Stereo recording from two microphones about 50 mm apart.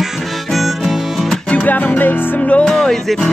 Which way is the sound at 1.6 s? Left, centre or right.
Left.